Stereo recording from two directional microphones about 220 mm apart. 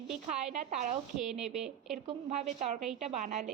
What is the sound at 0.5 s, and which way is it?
Speech, 35° right (ahead or behind).